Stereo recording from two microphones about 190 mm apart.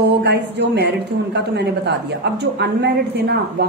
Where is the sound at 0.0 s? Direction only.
60° right (ahead or behind).